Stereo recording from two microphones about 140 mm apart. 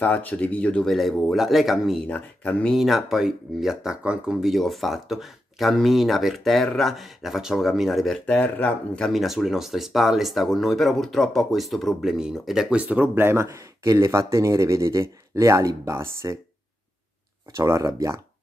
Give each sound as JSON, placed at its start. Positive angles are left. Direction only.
{"t": 0.0, "sound": "speech", "side_deg": 10}
{"t": 2.0, "sound": "speech", "side_deg": 10}
{"t": 8.3, "sound": "speech", "side_deg": 10}
{"t": 17.6, "sound": "speech", "side_deg": -20}